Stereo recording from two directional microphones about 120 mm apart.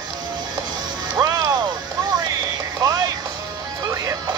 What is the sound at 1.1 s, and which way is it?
Music, 30° right (ahead or behind).